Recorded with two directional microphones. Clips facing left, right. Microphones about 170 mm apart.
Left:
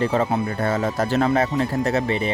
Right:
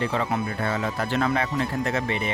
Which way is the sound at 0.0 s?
40° left (ahead or behind).